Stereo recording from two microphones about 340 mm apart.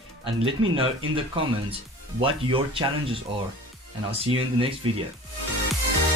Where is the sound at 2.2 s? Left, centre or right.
Centre.